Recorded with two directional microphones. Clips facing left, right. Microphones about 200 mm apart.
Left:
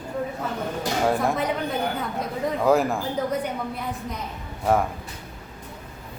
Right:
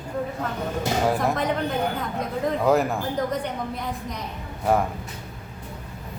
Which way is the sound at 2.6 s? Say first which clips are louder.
Left 1 dB; centre (ahead or behind).